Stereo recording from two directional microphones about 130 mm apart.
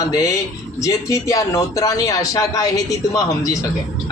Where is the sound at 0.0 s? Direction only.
25° left (ahead or behind).